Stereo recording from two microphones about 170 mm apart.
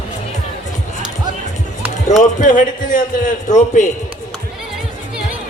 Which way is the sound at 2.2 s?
50° left (ahead or behind).